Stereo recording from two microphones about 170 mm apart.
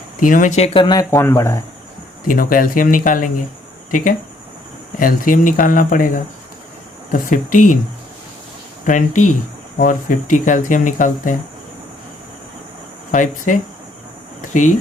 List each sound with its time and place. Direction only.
0.3 s speech: 50° left (ahead or behind); by 1.6 s 20° left (ahead or behind)
2.2 s speech: 55° left (ahead or behind)
4.9 s speech: 55° left (ahead or behind)
8.9 s speech: 50° left (ahead or behind)
13.1 s speech: 50° left (ahead or behind)